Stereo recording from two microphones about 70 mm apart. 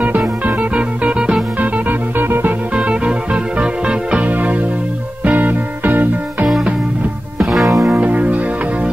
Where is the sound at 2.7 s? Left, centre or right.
Centre.